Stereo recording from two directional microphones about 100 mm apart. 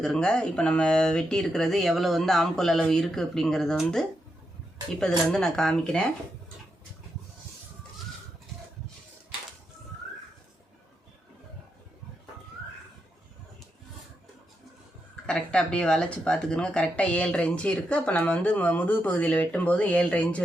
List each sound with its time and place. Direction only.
0.0 s speech: 5° left (ahead or behind)
5.1 s speech: 5° left (ahead or behind)
15.1 s speech: 10° left (ahead or behind)